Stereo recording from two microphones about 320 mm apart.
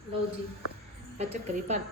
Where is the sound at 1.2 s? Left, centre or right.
Right.